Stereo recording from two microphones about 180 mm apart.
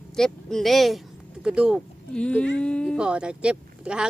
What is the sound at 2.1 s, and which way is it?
Speech, 5° left (ahead or behind).